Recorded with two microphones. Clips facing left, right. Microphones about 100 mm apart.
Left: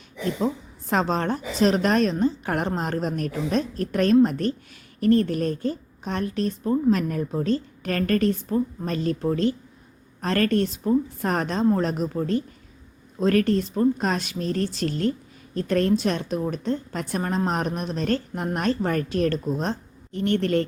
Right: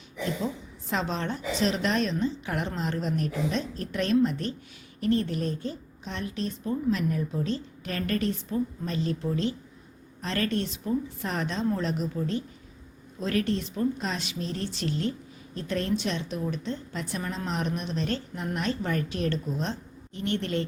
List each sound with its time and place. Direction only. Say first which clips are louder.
0.4 s a woman's voice: left 6 dB; 45° left (ahead or behind)